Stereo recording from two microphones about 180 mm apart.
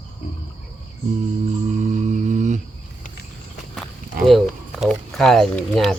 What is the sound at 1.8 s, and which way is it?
Music, 40° right (ahead or behind).